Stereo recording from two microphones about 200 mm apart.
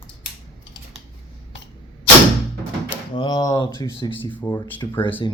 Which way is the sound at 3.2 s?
20° left (ahead or behind).